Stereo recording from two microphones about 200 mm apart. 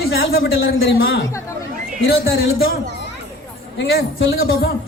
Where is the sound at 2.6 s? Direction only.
60° left (ahead or behind).